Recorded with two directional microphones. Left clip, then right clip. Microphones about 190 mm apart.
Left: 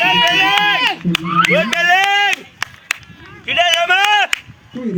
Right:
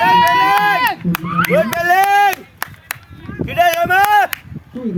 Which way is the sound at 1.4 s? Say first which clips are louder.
Right 1 dB; 60° right (ahead or behind).